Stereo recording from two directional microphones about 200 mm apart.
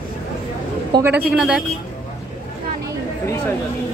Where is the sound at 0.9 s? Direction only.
10° right (ahead or behind).